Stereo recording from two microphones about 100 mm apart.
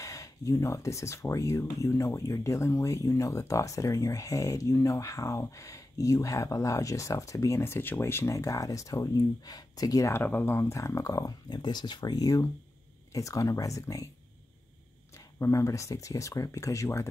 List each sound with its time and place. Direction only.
0.0 s speech: 35° left (ahead or behind)
10.1 s speech: 20° left (ahead or behind)
15.1 s speech: 30° left (ahead or behind)